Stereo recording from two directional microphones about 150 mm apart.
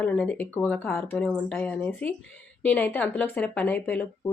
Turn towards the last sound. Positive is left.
turn(degrees=10)  # may be behind; listen again after turning